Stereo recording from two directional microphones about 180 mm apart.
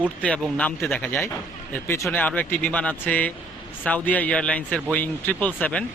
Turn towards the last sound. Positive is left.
turn(degrees=5)  # may be behind; listen again after turning